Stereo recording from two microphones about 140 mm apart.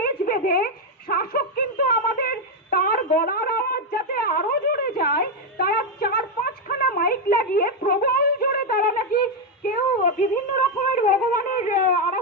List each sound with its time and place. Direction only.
0.0 s a sound: 90° left
9.6 s child singing: 70° left (ahead or behind)
10.9 s wind instrument: 70° left (ahead or behind)